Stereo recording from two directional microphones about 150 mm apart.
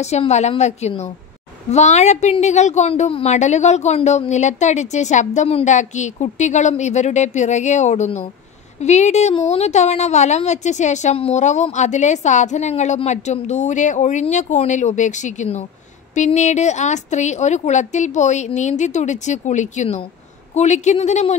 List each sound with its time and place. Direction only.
0.0 s a woman's voice: 45° left (ahead or behind)